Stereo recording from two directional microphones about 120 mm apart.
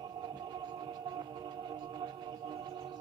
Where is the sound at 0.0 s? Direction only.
40° right (ahead or behind).